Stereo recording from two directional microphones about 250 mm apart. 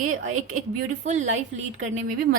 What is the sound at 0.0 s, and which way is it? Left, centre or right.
Speech, right.